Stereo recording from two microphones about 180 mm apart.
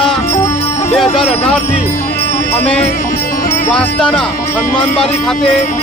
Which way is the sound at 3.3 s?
50° left (ahead or behind).